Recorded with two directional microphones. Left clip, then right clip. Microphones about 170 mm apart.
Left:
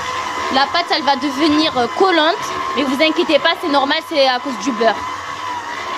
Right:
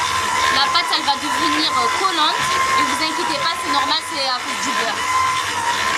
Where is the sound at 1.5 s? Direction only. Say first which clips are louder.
Left 2 dB; 40° left (ahead or behind).